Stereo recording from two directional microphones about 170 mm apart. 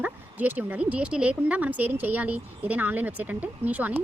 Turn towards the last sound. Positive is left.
turn(degrees=-10)  # may be behind; listen again after turning